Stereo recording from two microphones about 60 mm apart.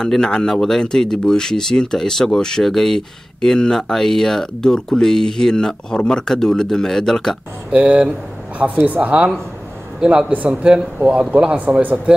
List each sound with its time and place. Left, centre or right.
0.0 s speech: centre
7.7 s a man's voice: right